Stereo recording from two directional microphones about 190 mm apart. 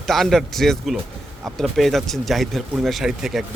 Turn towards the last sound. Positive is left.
turn(degrees=0)  # may be behind; listen again after turning